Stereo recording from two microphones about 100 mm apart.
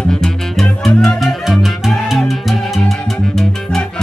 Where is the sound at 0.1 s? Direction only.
5° left (ahead or behind).